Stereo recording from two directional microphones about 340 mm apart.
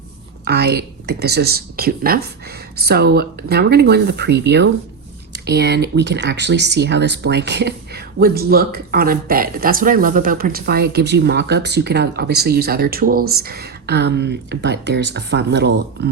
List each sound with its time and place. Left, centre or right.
0.4 s speech: right